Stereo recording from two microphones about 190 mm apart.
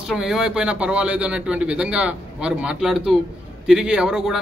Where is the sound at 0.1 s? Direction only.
Centre (ahead or behind).